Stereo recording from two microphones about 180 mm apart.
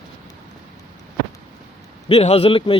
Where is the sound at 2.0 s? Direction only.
35° left (ahead or behind).